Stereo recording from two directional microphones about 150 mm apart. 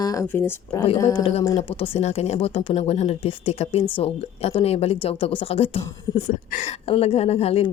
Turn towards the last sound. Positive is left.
turn(degrees=40)  # may be behind; listen again after turning